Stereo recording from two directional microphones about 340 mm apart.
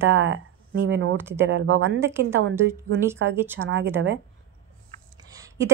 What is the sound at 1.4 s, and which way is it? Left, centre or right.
Speech, right.